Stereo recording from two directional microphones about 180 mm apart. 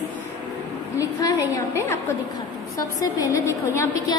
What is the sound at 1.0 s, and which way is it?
Speech, 20° left (ahead or behind).